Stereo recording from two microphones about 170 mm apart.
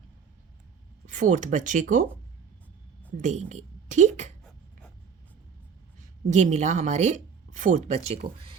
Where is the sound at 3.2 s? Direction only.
45° right (ahead or behind).